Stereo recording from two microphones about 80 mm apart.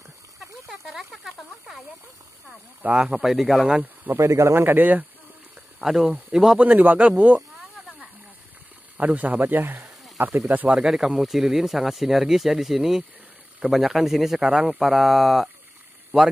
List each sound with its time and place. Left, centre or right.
0.7 s speech: centre
2.8 s speech: centre
3.6 s speech: centre
4.2 s speech: right
5.8 s speech: centre
8.9 s speech: centre
10.5 s speech: right
10.8 s speech: centre
16.1 s speech: centre